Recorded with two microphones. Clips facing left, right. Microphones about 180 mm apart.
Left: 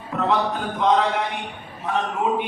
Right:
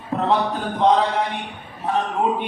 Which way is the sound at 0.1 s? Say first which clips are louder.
Right 2 dB; 35° right (ahead or behind).